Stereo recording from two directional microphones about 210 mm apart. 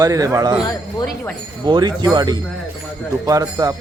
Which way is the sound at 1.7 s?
20° right (ahead or behind).